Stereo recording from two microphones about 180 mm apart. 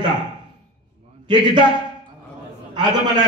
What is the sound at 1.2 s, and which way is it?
Speech, 25° right (ahead or behind).